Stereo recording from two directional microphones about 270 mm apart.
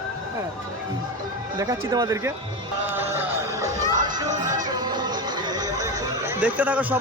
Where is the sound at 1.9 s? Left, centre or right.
Centre.